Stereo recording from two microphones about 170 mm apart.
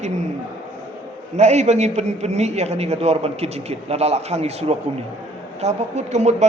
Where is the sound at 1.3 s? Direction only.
40° right (ahead or behind).